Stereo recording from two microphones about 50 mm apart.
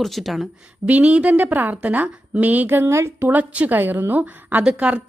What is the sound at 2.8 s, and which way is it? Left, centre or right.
Speech, right.